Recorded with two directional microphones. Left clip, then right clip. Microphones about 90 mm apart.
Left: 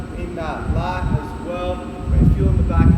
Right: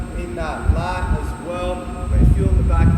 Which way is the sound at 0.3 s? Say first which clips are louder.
Even; centre (ahead or behind).